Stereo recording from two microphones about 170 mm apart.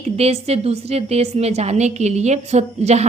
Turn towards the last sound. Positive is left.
turn(degrees=-40)  # may be behind; listen again after turning